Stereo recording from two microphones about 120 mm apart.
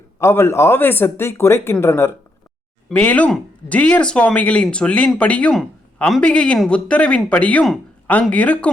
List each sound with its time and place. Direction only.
0.2 s speech: 20° left (ahead or behind)